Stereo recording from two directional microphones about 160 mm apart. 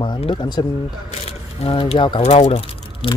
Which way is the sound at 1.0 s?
40° left (ahead or behind).